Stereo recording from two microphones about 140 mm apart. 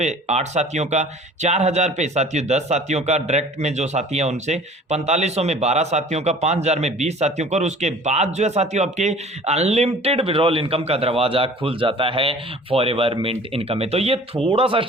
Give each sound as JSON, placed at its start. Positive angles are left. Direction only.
{"t": 0.0, "sound": "speech", "side_deg": -55}